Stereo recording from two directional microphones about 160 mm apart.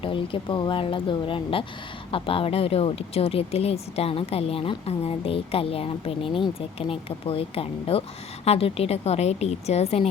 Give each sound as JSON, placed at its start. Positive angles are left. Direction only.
{"t": 0.0, "sound": "speech", "side_deg": 35}